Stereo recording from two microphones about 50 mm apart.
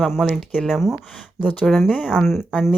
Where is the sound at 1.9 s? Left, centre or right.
Centre.